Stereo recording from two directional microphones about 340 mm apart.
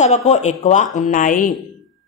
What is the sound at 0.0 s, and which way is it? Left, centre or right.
A woman's voice, centre.